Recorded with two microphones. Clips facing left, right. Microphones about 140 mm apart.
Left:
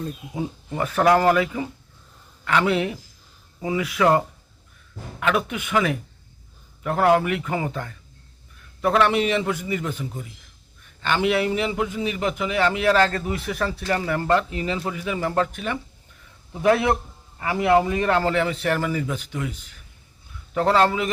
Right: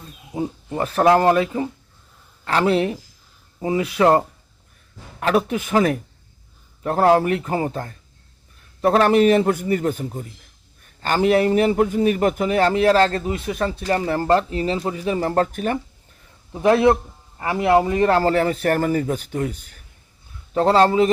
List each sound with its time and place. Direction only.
0.3 s a man's voice: 30° right (ahead or behind)
5.2 s a man's voice: 35° right (ahead or behind)
16.5 s a man's voice: 25° right (ahead or behind); by 19.8 s 45° right (ahead or behind)
20.5 s a man's voice: 30° right (ahead or behind)